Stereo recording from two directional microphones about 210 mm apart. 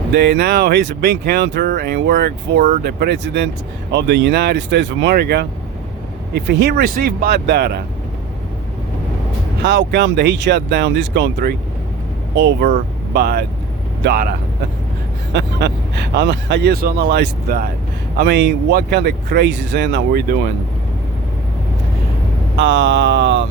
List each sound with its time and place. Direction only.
0.1 s speech: 55° right (ahead or behind)
9.6 s speech: 55° right (ahead or behind)
15.3 s speech: 55° right (ahead or behind)
22.5 s speech: 60° right (ahead or behind)